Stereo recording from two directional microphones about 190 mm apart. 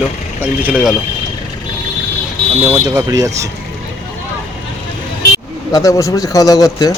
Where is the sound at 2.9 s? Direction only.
15° right (ahead or behind).